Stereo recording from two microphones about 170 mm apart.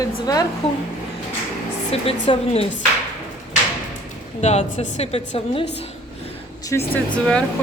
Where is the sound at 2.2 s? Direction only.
35° left (ahead or behind).